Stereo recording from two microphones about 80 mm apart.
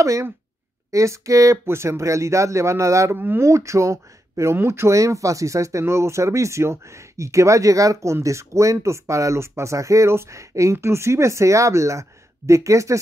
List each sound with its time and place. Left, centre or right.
0.0 s speech: right
3.2 s speech: right
3.4 s speech: right